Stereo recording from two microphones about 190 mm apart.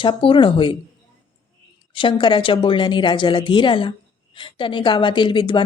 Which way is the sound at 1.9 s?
25° left (ahead or behind).